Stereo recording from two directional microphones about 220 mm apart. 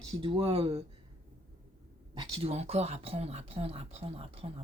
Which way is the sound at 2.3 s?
25° right (ahead or behind).